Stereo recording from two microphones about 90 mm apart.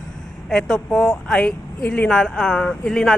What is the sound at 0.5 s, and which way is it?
Speech, 5° left (ahead or behind).